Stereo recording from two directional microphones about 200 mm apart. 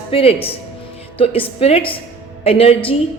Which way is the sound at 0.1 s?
30° left (ahead or behind).